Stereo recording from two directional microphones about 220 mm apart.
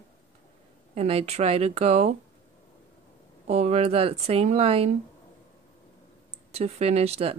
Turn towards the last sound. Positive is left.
turn(degrees=-25)  # may be behind; listen again after turning